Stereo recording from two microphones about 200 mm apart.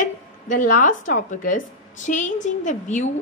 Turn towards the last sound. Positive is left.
turn(degrees=35)  # may be behind; listen again after turning